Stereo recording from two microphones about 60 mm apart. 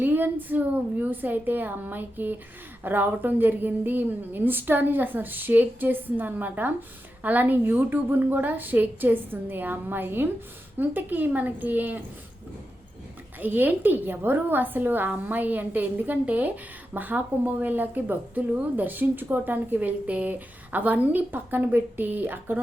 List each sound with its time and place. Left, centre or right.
0.0 s speech: right
13.4 s speech: right